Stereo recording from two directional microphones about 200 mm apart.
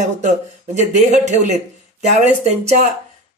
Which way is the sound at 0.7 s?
35° right (ahead or behind).